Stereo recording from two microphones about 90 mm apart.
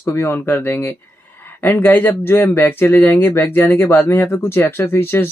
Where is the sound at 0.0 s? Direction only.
30° left (ahead or behind).